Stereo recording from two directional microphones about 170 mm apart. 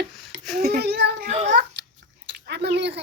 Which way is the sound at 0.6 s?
65° right (ahead or behind).